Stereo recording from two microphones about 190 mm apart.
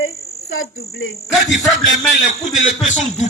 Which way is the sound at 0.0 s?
90° left.